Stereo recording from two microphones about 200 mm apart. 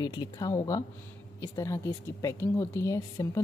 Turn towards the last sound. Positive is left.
turn(degrees=15)  # may be behind; listen again after turning